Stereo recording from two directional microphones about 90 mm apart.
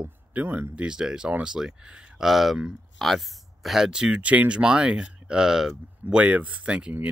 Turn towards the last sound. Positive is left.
turn(degrees=-10)  # may be behind; listen again after turning